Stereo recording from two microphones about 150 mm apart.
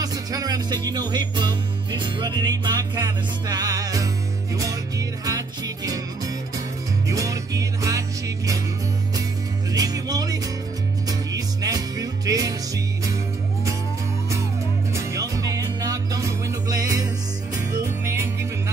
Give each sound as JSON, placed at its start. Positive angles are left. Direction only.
{"t": 0.0, "sound": "music", "side_deg": -25}
{"t": 9.7, "sound": "music", "side_deg": -25}
{"t": 15.0, "sound": "music", "side_deg": -20}